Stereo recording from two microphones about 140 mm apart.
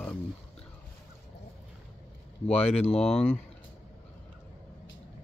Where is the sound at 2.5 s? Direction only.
45° left (ahead or behind).